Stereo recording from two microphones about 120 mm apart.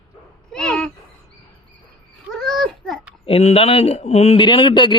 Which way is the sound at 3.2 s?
55° left (ahead or behind).